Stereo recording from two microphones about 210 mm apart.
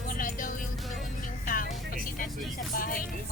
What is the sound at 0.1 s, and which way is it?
Music, 40° left (ahead or behind).